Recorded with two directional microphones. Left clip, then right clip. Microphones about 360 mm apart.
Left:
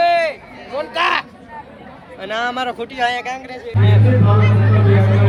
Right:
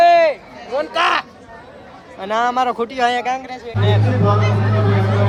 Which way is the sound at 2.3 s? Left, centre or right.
Centre.